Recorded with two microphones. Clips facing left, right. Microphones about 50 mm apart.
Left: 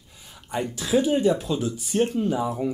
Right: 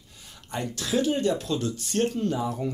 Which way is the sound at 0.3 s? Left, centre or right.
Centre.